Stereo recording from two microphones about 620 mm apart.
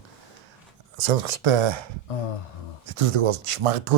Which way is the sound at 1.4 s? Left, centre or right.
Right.